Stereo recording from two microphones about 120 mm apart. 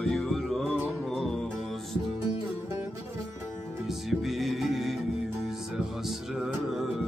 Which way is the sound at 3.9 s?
Centre (ahead or behind).